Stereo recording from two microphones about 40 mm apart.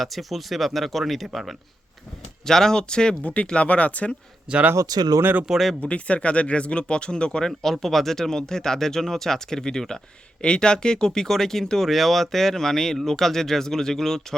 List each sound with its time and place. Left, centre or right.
0.0 s speech: centre
2.5 s speech: centre
3.2 s speech: left
4.5 s speech: right
5.5 s speech: centre
5.8 s speech: left
7.6 s speech: centre